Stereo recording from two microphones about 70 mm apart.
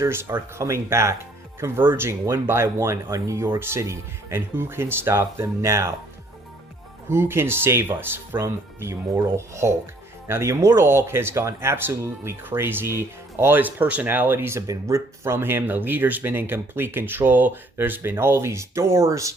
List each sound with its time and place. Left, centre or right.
0.0 s speech: right
7.1 s speech: right
14.7 s speech: right